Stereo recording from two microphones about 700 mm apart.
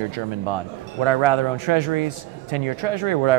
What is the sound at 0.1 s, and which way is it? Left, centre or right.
Speech, right.